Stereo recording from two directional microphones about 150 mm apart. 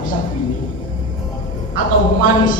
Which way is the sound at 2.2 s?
65° left (ahead or behind).